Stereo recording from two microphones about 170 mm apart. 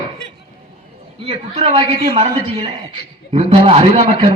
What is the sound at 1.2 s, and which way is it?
A man's voice, 35° right (ahead or behind).